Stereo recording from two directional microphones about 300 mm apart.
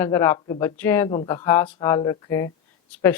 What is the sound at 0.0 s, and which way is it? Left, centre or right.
Speech, centre.